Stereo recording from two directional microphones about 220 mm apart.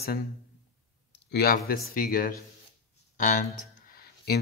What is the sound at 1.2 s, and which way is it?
Speech, 45° left (ahead or behind).